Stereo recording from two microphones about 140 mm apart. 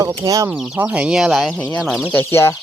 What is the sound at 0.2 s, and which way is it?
Speech, 20° right (ahead or behind).